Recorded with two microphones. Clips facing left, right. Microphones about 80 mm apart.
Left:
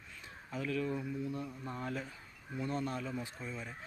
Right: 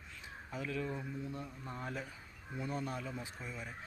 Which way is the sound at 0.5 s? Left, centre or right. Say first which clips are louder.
Left 4 dB; centre.